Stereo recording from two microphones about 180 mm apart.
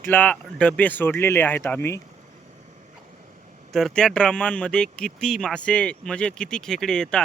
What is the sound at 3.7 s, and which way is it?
Speech, centre (ahead or behind).